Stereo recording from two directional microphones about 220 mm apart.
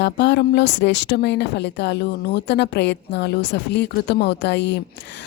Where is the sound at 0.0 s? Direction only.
50° left (ahead or behind).